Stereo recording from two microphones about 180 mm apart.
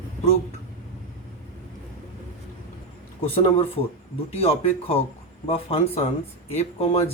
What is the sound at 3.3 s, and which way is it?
Speech, 35° left (ahead or behind).